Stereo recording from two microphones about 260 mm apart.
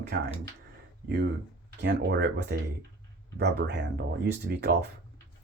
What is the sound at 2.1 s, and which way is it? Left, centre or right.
Speech, right.